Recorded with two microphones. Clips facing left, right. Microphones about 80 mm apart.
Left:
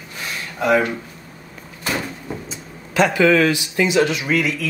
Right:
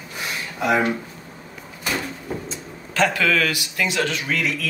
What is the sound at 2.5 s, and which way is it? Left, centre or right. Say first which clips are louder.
A man's voice: left 1 dB; centre.